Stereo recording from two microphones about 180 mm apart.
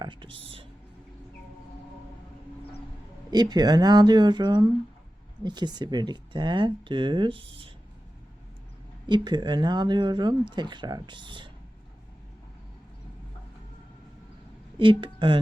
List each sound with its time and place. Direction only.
0.0 s speech: 25° right (ahead or behind)
3.3 s speech: 20° right (ahead or behind)
9.0 s speech: 25° right (ahead or behind)
14.8 s speech: 30° right (ahead or behind)